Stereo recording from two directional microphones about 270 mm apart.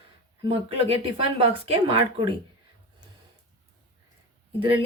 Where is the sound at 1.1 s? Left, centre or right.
Right.